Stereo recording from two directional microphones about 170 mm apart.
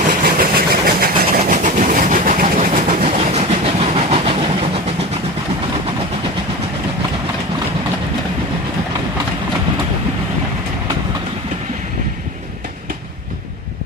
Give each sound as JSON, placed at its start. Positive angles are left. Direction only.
{"t": 0.1, "sound": "vehicle", "side_deg": -55}
{"t": 1.4, "sound": "train", "side_deg": -45}